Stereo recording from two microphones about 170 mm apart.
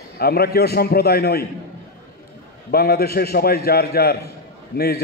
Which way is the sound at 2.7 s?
65° left (ahead or behind).